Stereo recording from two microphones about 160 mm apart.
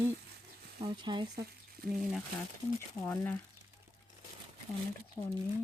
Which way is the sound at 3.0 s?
10° left (ahead or behind).